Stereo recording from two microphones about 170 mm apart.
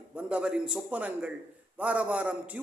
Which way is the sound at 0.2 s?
5° right (ahead or behind).